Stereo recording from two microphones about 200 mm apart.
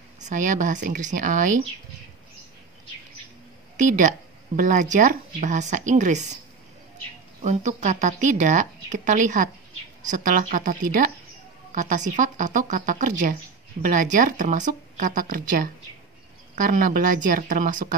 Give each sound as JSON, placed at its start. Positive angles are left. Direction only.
{"t": 0.2, "sound": "speech", "side_deg": -40}
{"t": 3.7, "sound": "speech", "side_deg": -40}
{"t": 7.4, "sound": "speech", "side_deg": -35}